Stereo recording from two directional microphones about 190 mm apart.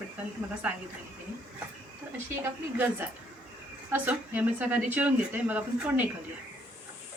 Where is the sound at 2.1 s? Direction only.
10° right (ahead or behind).